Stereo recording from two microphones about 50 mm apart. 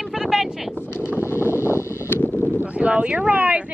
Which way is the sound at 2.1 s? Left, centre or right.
Left.